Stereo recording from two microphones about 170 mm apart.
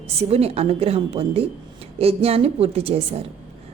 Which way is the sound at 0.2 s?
35° right (ahead or behind).